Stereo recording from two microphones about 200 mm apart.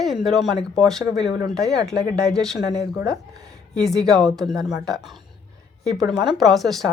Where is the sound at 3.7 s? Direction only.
Centre (ahead or behind).